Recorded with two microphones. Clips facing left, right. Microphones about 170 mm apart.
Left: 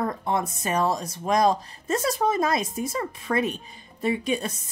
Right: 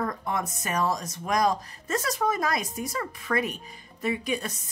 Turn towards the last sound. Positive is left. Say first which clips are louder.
# left 3 dB
turn(degrees=25)  # may be behind; listen again after turning